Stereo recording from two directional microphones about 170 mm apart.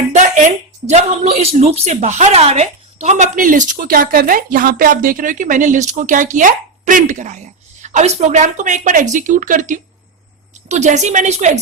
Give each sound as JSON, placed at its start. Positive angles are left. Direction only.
{"t": 0.1, "sound": "a woman's voice", "side_deg": -45}